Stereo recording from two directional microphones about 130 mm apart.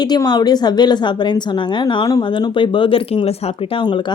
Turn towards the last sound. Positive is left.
turn(degrees=40)  # may be behind; listen again after turning